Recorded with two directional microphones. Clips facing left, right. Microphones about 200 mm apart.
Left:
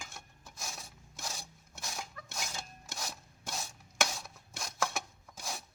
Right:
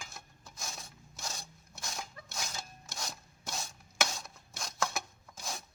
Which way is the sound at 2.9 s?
Centre (ahead or behind).